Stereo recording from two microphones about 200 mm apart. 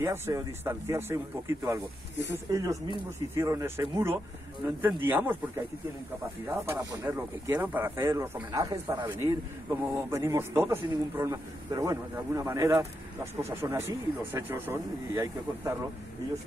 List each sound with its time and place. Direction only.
0.0 s speech: 15° right (ahead or behind)
6.4 s speech: 15° right (ahead or behind)